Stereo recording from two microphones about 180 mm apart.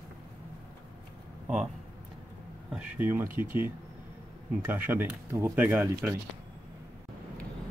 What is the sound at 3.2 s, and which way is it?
Speech, 50° right (ahead or behind).